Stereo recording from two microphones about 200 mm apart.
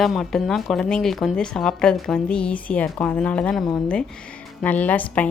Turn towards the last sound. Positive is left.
turn(degrees=5)  # may be behind; listen again after turning